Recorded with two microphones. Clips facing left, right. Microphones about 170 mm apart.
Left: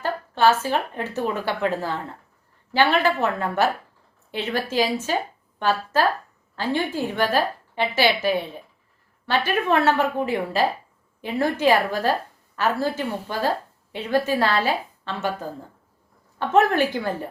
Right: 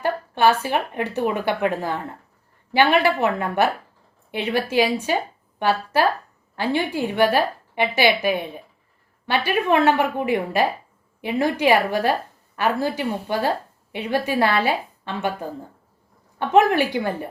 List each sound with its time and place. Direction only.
0.0 s a woman's voice: 15° right (ahead or behind)